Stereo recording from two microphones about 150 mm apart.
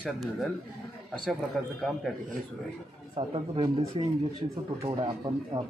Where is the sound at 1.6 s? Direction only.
5° left (ahead or behind).